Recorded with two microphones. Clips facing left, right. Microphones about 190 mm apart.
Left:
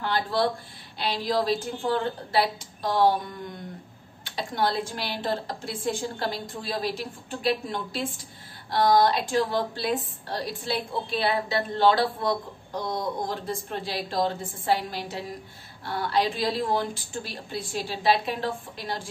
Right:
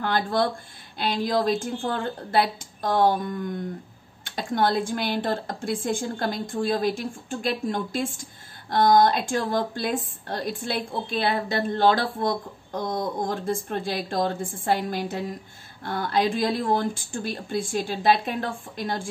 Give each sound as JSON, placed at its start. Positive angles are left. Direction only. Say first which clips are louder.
{"t": 0.0, "sound": "a woman's voice", "louder": "right 2 dB", "side_deg": -50}
{"t": 13.3, "sound": "a woman's voice", "louder": "right 4 dB", "side_deg": -50}